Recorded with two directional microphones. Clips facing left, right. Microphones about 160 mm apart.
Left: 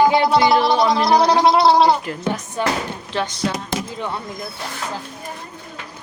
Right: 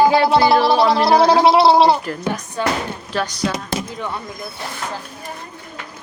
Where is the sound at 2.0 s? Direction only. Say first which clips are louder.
Even; 20° left (ahead or behind).